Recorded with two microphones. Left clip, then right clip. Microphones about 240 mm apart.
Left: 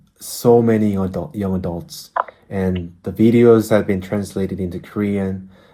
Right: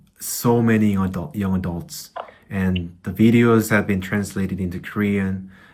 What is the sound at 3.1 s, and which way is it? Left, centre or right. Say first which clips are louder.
Speech: left 5 dB; left.